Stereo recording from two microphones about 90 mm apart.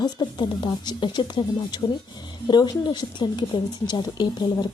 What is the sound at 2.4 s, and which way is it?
Speech, 55° left (ahead or behind).